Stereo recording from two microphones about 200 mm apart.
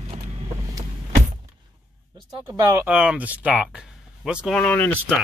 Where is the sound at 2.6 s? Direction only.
15° right (ahead or behind); by 5.2 s 10° left (ahead or behind).